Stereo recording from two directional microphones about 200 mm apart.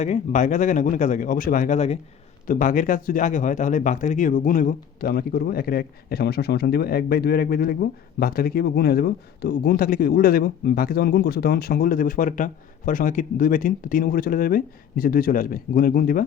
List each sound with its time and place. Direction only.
0.0 s speech: 40° left (ahead or behind)